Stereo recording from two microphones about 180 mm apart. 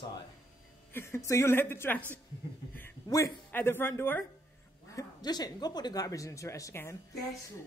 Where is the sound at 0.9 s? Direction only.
15° left (ahead or behind).